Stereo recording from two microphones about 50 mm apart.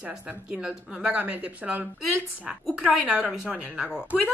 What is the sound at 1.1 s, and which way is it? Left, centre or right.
Speech, right.